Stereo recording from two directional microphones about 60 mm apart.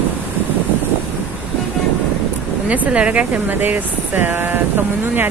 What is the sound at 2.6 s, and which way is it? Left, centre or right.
Speech, right.